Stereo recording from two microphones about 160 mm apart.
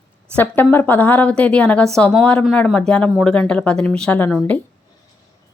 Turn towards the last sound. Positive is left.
turn(degrees=10)  # may be behind; listen again after turning